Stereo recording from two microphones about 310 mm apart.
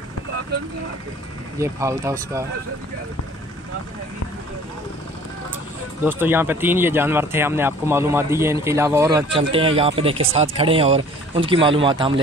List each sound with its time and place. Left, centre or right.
1.6 s speech: centre
6.0 s speech: centre